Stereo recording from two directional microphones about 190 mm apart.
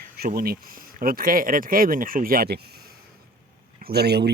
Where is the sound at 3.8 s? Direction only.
60° right (ahead or behind).